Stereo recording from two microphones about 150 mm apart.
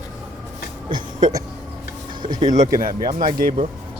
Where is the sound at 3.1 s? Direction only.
65° right (ahead or behind).